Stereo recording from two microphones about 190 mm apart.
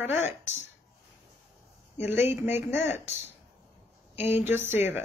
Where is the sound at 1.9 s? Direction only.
10° right (ahead or behind).